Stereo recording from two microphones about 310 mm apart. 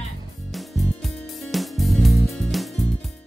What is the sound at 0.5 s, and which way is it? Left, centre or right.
Music, centre.